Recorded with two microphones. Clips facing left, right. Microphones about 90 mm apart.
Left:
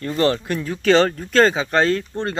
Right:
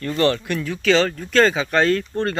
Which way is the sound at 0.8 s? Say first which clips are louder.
Left 3 dB; 45° left (ahead or behind).